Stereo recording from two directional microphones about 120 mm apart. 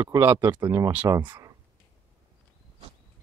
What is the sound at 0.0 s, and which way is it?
Speech, 25° right (ahead or behind).